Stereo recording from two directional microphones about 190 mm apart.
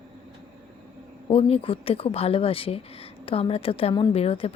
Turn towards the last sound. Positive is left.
turn(degrees=30)  # may be behind; listen again after turning